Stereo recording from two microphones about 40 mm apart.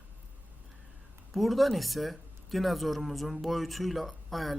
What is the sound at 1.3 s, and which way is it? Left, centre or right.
Speech, centre.